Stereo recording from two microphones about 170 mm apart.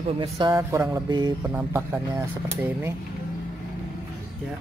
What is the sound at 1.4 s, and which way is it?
Speech, 15° right (ahead or behind).